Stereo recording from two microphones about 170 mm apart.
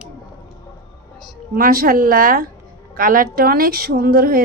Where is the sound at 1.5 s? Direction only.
60° right (ahead or behind).